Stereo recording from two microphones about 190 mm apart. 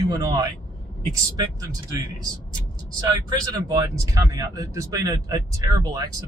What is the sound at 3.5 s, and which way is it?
Speech, 20° right (ahead or behind).